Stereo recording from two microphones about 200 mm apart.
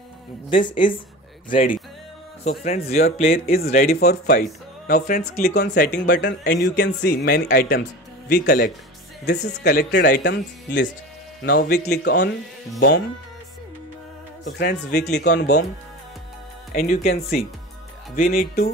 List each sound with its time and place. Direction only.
0.5 s a woman's voice: 25° left (ahead or behind)
3.3 s speech: 45° left (ahead or behind); by 10.9 s 60° left (ahead or behind)
11.4 s speech: 50° left (ahead or behind)
14.4 s speech: 55° left (ahead or behind)
16.7 s speech: 45° left (ahead or behind)